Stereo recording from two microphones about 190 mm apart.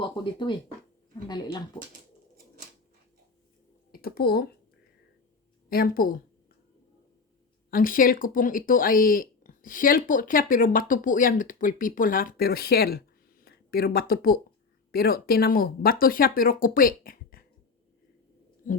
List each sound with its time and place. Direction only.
0.0 s speech: 25° left (ahead or behind)
3.9 s speech: 55° left (ahead or behind)
5.6 s speech: 50° left (ahead or behind)
7.7 s speech: 45° left (ahead or behind)